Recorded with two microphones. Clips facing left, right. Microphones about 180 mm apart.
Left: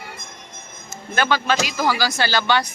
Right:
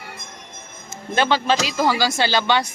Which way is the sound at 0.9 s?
25° right (ahead or behind).